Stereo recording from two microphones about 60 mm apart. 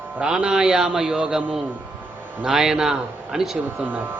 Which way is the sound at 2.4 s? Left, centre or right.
Centre.